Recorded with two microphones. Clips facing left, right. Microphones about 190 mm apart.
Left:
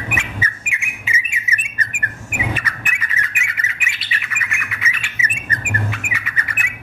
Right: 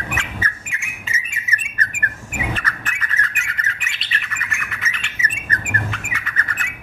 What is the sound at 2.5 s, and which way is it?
Bird, 10° left (ahead or behind).